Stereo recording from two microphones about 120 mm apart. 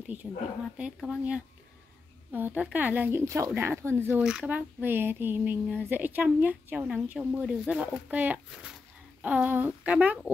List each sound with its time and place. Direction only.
0.0 s speech: 15° right (ahead or behind)
4.2 s speech: 5° right (ahead or behind)